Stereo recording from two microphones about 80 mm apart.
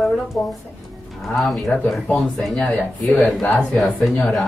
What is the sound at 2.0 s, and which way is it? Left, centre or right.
Speech, centre.